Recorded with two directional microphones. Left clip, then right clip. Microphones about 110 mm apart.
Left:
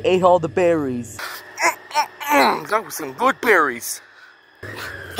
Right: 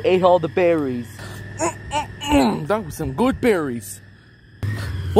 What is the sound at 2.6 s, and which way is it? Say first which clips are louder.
Speech: left 1 dB; 15° right (ahead or behind).